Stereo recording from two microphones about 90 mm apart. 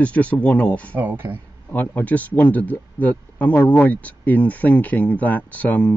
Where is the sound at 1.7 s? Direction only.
20° left (ahead or behind).